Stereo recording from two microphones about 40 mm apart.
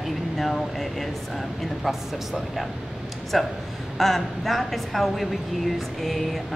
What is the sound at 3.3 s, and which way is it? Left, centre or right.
A woman's voice, centre.